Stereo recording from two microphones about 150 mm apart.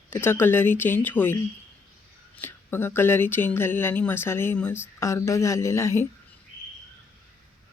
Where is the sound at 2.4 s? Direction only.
15° left (ahead or behind).